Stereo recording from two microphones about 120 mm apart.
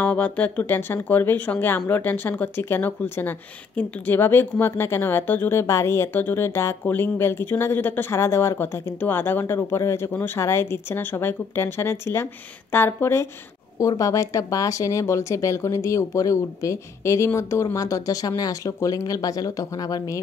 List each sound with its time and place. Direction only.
0.0 s speech: 10° left (ahead or behind); by 20.2 s 30° left (ahead or behind)